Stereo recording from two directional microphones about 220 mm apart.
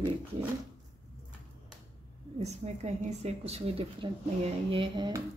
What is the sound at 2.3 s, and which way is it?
A woman's voice, 30° right (ahead or behind).